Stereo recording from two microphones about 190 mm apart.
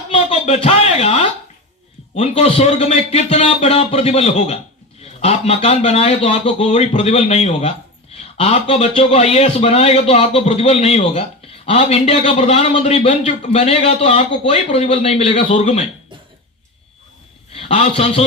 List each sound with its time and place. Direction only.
0.1 s a sound: 30° left (ahead or behind)
2.1 s a man's voice: 35° left (ahead or behind)
17.5 s a man's voice: 30° left (ahead or behind)